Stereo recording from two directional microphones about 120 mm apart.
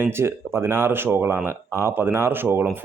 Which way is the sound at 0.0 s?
20° right (ahead or behind).